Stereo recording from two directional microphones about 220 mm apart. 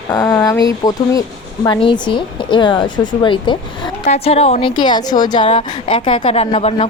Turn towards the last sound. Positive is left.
turn(degrees=30)  # may be behind; listen again after turning